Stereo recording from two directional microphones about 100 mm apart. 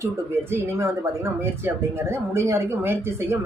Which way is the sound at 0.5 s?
25° right (ahead or behind).